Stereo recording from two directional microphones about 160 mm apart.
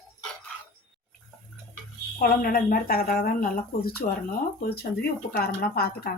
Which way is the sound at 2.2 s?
60° left (ahead or behind).